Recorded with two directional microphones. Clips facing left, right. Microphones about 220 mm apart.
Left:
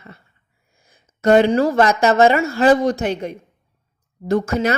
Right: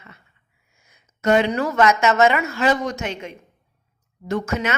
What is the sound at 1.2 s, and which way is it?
A woman's voice, 35° left (ahead or behind).